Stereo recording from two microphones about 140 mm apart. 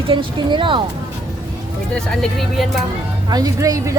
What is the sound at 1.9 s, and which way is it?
Speech, 5° left (ahead or behind).